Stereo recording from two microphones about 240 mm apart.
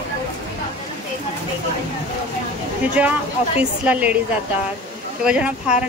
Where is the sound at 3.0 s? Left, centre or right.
Centre.